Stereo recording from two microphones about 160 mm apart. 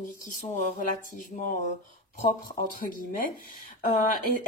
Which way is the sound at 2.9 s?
60° left (ahead or behind).